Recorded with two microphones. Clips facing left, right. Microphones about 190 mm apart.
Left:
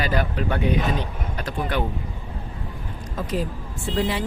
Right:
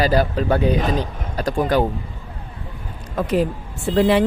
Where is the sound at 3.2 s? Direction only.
65° right (ahead or behind).